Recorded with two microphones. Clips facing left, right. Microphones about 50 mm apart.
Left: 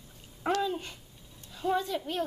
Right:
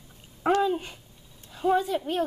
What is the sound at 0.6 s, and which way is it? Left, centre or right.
A woman's voice, centre.